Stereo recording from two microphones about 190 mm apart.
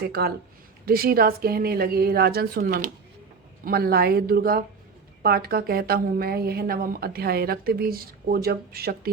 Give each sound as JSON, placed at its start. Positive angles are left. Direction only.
{"t": 0.0, "sound": "a woman's voice", "side_deg": -55}